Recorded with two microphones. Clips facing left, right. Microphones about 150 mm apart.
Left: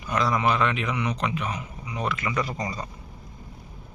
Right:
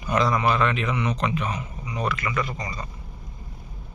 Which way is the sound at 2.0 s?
20° left (ahead or behind).